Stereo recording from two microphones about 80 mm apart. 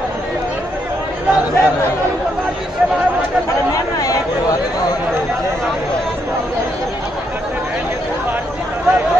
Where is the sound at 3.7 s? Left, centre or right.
Left.